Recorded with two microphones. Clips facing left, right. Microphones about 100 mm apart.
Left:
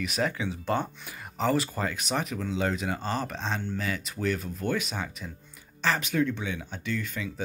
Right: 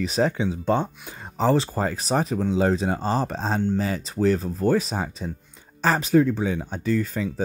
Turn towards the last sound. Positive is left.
turn(degrees=-40)  # may be behind; listen again after turning